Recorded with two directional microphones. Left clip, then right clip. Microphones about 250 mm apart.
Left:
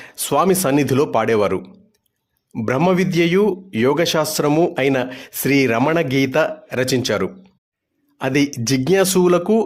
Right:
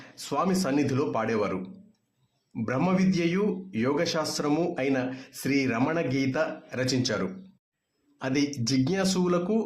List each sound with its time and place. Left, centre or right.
0.0 s speech: left